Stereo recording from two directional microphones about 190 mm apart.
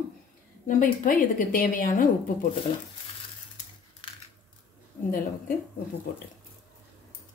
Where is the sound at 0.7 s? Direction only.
45° left (ahead or behind).